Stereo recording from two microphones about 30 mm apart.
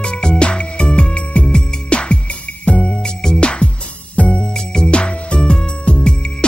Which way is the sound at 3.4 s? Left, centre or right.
Left.